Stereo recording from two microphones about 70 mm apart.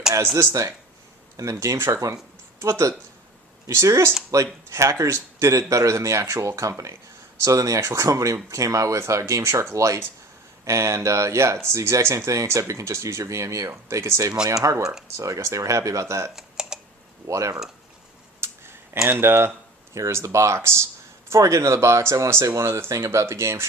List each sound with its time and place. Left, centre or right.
0.3 s speech: right
16.3 s typing: centre
17.2 s speech: right
18.3 s a sound: right
19.0 s speech: right